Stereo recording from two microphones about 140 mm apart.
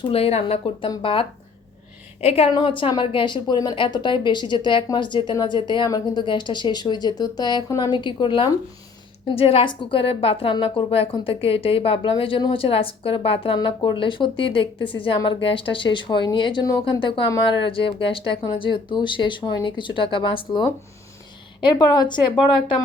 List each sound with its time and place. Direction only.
0.1 s a woman's voice: 45° left (ahead or behind)